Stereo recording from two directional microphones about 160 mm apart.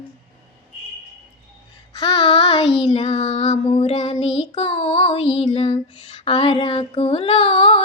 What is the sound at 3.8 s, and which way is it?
Child singing, 40° left (ahead or behind).